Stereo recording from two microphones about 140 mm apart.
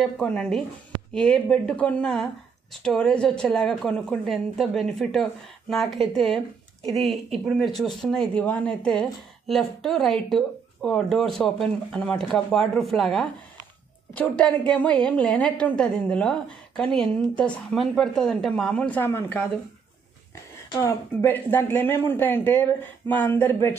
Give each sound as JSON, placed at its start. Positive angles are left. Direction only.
{"t": 0.0, "sound": "a woman's voice", "side_deg": 5}
{"t": 20.7, "sound": "a woman's voice", "side_deg": 15}